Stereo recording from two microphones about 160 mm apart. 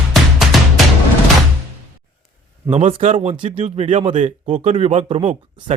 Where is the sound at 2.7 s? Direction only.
40° right (ahead or behind).